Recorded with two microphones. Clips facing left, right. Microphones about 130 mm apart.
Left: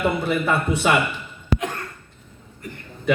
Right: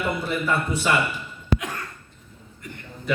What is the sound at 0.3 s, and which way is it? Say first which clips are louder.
Speech: left 3 dB; 60° left (ahead or behind).